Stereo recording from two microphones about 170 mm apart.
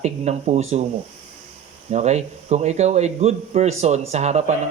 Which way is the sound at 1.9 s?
40° right (ahead or behind).